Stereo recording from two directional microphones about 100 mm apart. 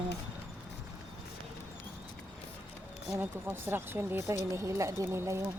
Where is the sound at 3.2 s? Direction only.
25° right (ahead or behind).